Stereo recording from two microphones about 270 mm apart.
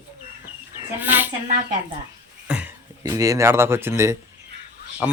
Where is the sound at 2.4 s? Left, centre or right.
Centre.